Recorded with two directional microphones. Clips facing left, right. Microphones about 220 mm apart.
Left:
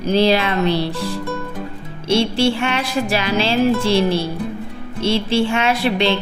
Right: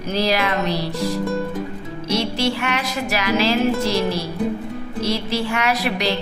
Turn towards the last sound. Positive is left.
turn(degrees=30)  # may be behind; listen again after turning